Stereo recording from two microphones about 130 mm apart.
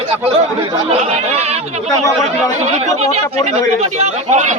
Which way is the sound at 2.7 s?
60° right (ahead or behind).